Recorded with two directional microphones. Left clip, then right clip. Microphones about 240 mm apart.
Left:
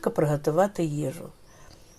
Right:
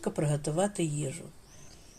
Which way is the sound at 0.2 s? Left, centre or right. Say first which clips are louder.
Left 8 dB; left.